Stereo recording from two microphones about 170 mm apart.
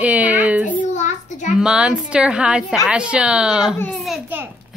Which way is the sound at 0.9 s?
45° left (ahead or behind).